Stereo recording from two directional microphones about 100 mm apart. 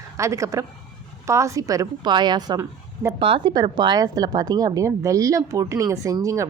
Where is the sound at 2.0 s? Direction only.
45° right (ahead or behind).